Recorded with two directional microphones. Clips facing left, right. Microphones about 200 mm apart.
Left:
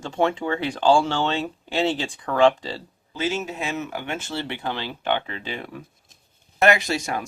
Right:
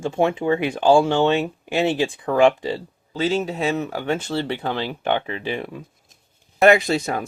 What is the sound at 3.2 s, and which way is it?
Speech, 35° right (ahead or behind).